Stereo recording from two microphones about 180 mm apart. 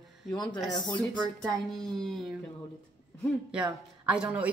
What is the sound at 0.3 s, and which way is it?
Speech, 20° left (ahead or behind).